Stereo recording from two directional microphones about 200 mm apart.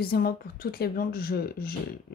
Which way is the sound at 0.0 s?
50° left (ahead or behind).